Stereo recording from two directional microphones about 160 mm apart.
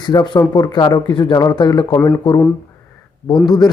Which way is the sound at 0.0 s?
25° left (ahead or behind).